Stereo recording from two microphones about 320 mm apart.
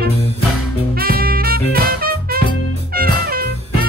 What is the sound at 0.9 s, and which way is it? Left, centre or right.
Music, right.